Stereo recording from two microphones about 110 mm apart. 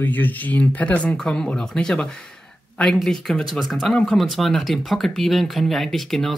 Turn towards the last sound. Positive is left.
turn(degrees=0)  # may be behind; listen again after turning